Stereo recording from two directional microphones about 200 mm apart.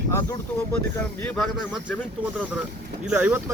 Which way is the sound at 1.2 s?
5° left (ahead or behind).